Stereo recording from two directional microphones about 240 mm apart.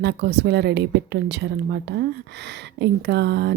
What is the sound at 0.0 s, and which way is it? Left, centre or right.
A woman's voice, right.